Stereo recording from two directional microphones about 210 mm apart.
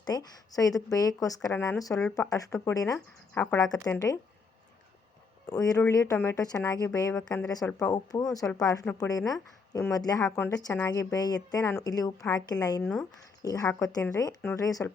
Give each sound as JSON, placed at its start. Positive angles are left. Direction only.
{"t": 0.0, "sound": "speech", "side_deg": 20}
{"t": 5.5, "sound": "speech", "side_deg": 15}